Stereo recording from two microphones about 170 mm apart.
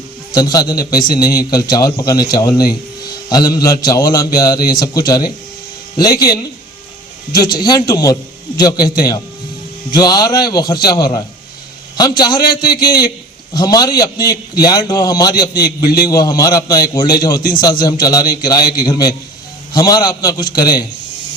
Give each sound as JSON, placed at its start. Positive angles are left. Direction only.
{"t": 0.3, "sound": "a man's voice", "side_deg": 20}
{"t": 15.8, "sound": "a man's voice", "side_deg": 65}
{"t": 16.0, "sound": "a man's voice", "side_deg": 20}